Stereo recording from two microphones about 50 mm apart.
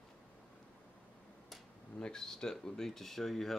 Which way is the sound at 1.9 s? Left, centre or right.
Centre.